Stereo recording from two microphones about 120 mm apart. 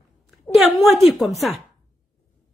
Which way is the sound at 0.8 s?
Centre (ahead or behind).